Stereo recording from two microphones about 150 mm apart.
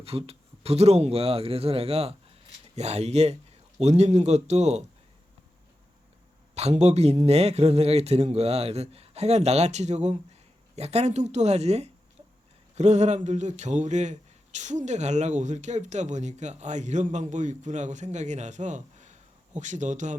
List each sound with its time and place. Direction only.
0.0 s a man's voice: 40° right (ahead or behind)
6.5 s a man's voice: 45° right (ahead or behind)